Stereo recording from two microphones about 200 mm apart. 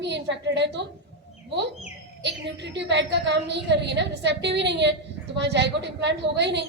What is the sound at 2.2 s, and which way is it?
A woman's voice, 60° right (ahead or behind).